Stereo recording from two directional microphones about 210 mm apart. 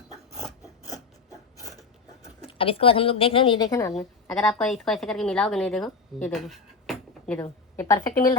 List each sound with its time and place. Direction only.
0.9 s filing: 15° left (ahead or behind)
2.2 s speech: 25° left (ahead or behind); by 7.3 s centre (ahead or behind)
7.8 s a woman's voice: 15° left (ahead or behind)